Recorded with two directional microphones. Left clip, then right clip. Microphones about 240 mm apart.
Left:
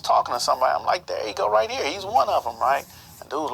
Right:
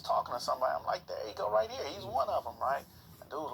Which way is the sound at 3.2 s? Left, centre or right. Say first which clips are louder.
Left 13 dB; left.